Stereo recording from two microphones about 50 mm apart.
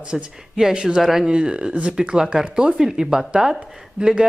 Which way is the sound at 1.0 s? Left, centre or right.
Centre.